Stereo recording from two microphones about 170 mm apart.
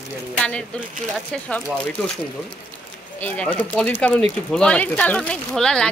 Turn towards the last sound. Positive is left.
turn(degrees=5)  # may be behind; listen again after turning